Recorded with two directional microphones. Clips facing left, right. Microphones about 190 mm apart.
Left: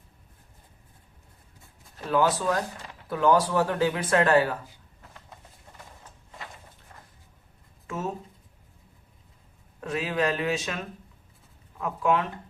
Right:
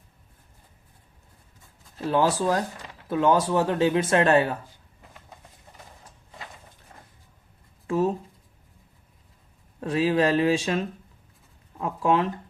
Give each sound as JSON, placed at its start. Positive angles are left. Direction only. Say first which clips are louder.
{"t": 2.0, "sound": "speech", "louder": "right 2 dB", "side_deg": -30}
{"t": 7.9, "sound": "writing", "louder": "right 9 dB", "side_deg": -35}
{"t": 9.8, "sound": "speech", "louder": "right 5 dB", "side_deg": -30}